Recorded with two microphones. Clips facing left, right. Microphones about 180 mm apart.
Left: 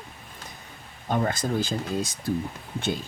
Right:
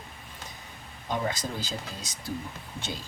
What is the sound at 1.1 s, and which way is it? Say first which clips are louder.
Speech: left 5 dB; 50° left (ahead or behind).